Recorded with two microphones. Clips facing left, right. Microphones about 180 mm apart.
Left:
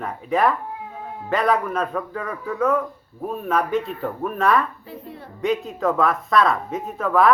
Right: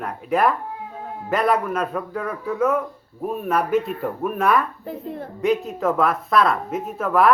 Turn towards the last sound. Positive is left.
turn(degrees=-5)  # may be behind; listen again after turning